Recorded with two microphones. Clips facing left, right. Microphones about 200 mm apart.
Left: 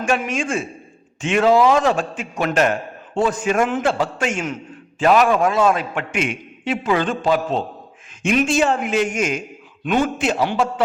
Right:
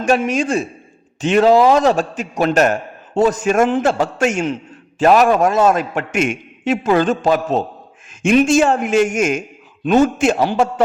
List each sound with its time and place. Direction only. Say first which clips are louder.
0.3 s a man's voice: right 5 dB; 40° right (ahead or behind)